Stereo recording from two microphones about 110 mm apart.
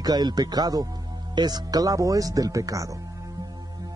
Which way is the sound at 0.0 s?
40° right (ahead or behind).